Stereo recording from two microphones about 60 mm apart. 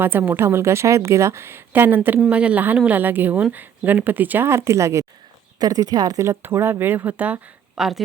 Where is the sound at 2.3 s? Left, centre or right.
Right.